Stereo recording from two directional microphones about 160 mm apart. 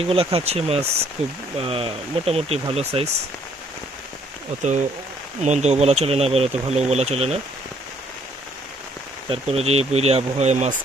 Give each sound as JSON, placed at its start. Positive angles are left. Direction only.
{"t": 0.0, "sound": "speech", "side_deg": -35}
{"t": 5.4, "sound": "speech", "side_deg": -45}
{"t": 9.3, "sound": "speech", "side_deg": -40}